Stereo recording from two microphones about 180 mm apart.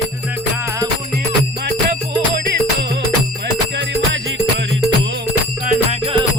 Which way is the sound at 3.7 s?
90° right.